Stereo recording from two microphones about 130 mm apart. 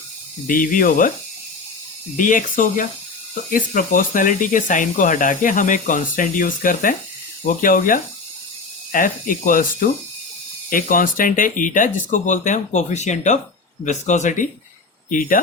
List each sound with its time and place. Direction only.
0.4 s speech: 90° left
2.1 s speech: 90° left
15.1 s speech: 90° left